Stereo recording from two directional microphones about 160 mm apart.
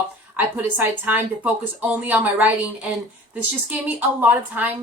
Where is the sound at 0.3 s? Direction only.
10° right (ahead or behind).